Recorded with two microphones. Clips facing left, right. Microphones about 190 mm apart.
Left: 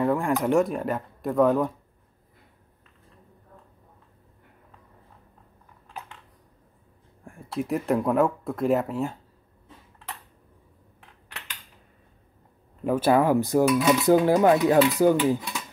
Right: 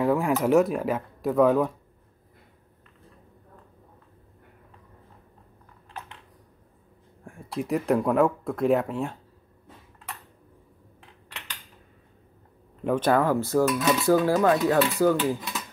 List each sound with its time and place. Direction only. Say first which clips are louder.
0.0 s speech: right 1 dB; centre (ahead or behind)
7.2 s speech: left 1 dB; centre (ahead or behind)
12.8 s speech: left 2 dB; 5° left (ahead or behind)